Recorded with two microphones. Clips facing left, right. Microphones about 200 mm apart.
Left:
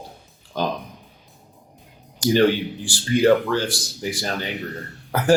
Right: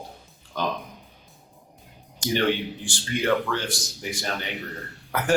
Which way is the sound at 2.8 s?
35° left (ahead or behind).